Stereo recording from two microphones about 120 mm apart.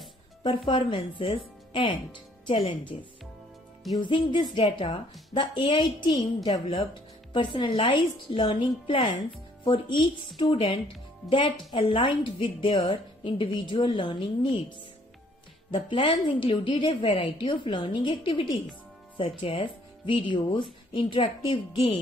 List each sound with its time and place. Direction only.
0.4 s a woman's voice: 40° left (ahead or behind)
4.0 s a woman's voice: 40° left (ahead or behind)
15.7 s a woman's voice: 40° left (ahead or behind)